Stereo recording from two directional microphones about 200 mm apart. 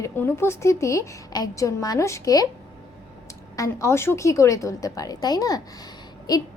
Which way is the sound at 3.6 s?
15° left (ahead or behind).